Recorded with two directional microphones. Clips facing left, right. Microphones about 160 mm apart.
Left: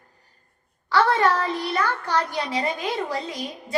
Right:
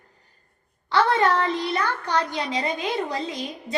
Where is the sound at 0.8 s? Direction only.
20° right (ahead or behind).